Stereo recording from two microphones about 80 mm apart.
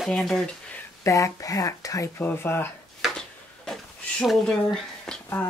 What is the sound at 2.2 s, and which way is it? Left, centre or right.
Speech, left.